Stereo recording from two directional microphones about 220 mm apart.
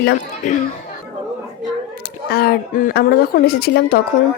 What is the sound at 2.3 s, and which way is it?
A woman's voice, 45° left (ahead or behind).